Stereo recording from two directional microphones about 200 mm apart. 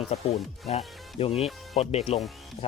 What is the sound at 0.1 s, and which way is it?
Speech, 30° left (ahead or behind).